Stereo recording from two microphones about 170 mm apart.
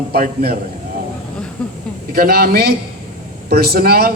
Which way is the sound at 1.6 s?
5° left (ahead or behind).